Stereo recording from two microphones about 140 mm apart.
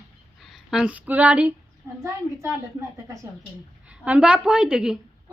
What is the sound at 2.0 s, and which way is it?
Speech, 20° right (ahead or behind).